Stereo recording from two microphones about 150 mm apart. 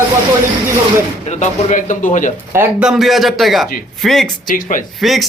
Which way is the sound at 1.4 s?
60° left (ahead or behind).